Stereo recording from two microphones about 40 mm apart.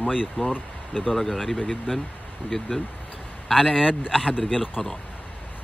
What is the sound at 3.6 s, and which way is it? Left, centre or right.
Speech, centre.